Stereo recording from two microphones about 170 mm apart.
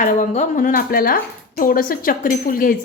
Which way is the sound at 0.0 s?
50° left (ahead or behind).